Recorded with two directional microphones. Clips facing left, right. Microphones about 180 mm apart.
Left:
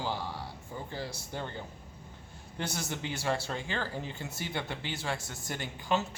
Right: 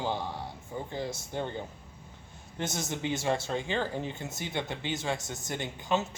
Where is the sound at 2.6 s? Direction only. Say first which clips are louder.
Right 3 dB; 20° right (ahead or behind).